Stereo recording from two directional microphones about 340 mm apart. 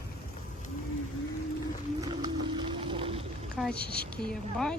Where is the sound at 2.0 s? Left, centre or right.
Centre.